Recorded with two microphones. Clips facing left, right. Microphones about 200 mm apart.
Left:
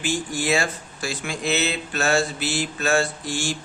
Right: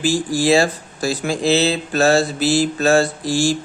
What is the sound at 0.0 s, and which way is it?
Speech, 35° right (ahead or behind).